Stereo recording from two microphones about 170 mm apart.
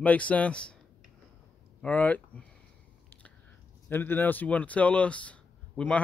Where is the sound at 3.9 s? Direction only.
10° left (ahead or behind).